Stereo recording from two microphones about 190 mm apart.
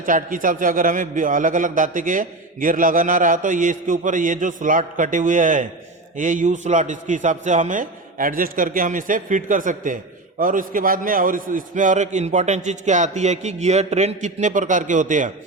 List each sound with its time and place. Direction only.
0.0 s a man's voice: 45° right (ahead or behind)